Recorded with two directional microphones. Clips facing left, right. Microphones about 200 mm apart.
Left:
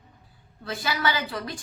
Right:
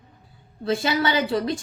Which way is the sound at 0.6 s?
25° right (ahead or behind).